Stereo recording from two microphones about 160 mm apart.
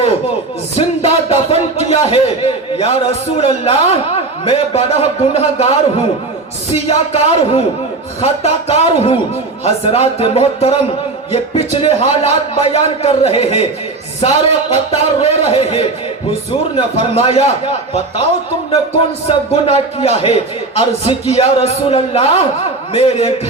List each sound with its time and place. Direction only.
0.8 s a man's voice: 40° left (ahead or behind)
6.8 s a man's voice: 40° left (ahead or behind)
19.6 s a man's voice: 40° left (ahead or behind)